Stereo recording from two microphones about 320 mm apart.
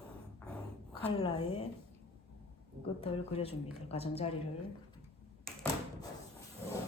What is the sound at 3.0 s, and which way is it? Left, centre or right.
A woman's voice, centre.